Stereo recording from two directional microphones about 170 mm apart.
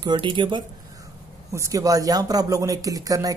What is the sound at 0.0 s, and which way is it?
Speech, 30° right (ahead or behind).